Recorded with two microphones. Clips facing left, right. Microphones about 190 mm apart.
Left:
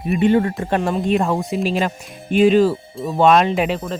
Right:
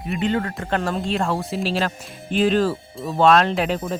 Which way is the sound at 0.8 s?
Centre (ahead or behind).